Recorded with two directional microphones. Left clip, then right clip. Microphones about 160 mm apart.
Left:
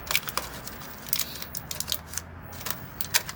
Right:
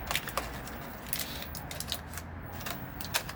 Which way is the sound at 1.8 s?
5° left (ahead or behind).